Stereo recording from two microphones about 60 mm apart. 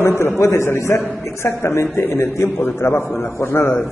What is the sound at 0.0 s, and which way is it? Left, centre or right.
A man's voice, left.